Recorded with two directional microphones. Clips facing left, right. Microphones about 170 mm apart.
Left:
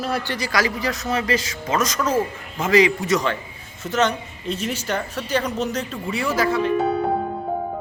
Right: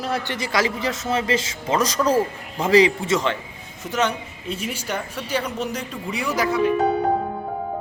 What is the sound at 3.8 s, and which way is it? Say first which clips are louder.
A woman's voice: left 2 dB; 10° right (ahead or behind).